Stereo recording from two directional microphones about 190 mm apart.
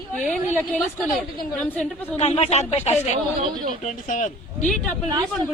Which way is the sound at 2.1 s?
35° left (ahead or behind).